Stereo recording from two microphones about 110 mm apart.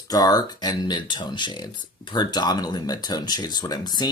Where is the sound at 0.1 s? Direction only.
35° left (ahead or behind).